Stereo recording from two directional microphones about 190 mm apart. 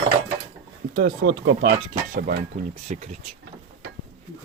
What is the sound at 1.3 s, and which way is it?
Speech, 85° right.